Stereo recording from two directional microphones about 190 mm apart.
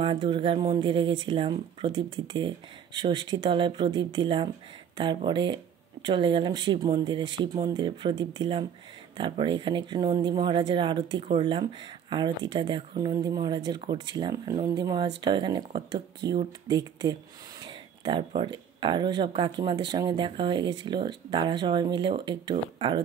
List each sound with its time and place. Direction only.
0.0 s speech: 25° right (ahead or behind)